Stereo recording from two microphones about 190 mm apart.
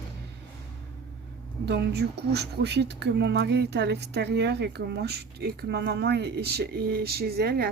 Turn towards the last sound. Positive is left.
turn(degrees=-55)  # may be behind; listen again after turning